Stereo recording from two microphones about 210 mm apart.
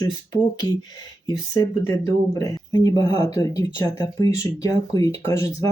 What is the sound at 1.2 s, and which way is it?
Speech, 15° left (ahead or behind).